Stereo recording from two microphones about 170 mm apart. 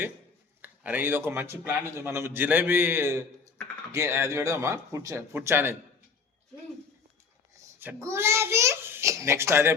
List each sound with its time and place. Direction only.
0.6 s a man's voice: 10° right (ahead or behind)
7.8 s a man's voice: 15° right (ahead or behind)